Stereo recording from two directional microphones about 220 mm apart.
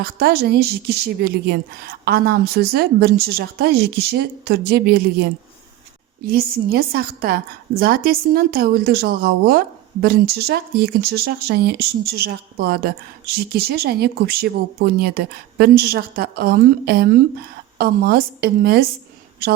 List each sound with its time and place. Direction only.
0.0 s a woman's voice: 45° right (ahead or behind)